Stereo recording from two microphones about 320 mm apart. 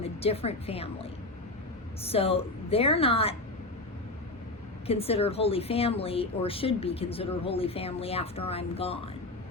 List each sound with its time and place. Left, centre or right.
0.0 s a woman's voice: centre
2.0 s a woman's voice: centre
4.9 s a woman's voice: centre